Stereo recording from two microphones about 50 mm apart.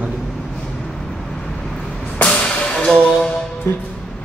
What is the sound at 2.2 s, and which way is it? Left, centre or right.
Music, left.